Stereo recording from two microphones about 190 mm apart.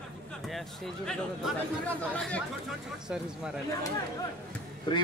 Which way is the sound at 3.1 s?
5° right (ahead or behind).